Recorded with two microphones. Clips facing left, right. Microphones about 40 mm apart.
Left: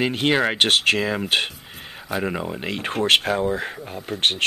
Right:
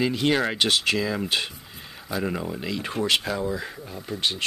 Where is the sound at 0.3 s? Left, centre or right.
Left.